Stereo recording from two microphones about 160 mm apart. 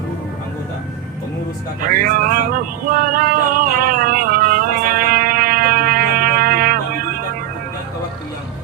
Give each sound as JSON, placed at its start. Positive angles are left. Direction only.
{"t": 1.9, "sound": "male singing", "side_deg": -60}